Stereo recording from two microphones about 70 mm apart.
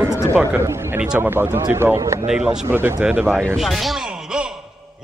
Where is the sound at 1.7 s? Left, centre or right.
Right.